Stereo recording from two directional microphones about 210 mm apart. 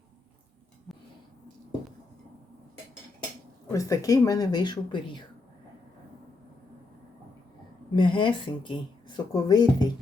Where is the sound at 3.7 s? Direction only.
15° left (ahead or behind).